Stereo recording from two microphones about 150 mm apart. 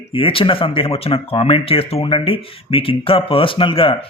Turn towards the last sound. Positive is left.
turn(degrees=35)  # may be behind; listen again after turning